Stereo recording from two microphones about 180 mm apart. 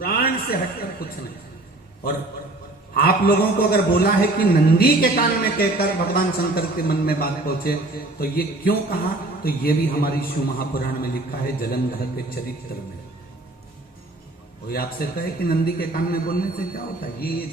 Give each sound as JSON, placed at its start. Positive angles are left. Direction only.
{"t": 0.0, "sound": "a sound", "side_deg": 55}
{"t": 2.9, "sound": "a man's voice", "side_deg": 55}
{"t": 14.7, "sound": "a man's voice", "side_deg": 55}